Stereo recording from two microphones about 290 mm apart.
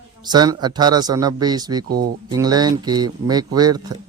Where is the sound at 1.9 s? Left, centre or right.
Right.